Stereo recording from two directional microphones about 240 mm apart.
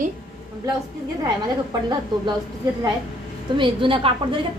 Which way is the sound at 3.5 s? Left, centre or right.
Right.